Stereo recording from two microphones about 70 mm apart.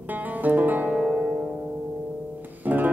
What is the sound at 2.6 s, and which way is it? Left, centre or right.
Music, right.